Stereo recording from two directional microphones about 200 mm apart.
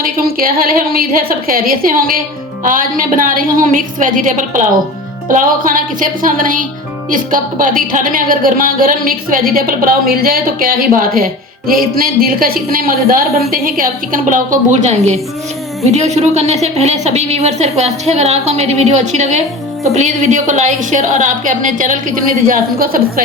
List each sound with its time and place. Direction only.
0.0 s a woman's voice: 45° right (ahead or behind)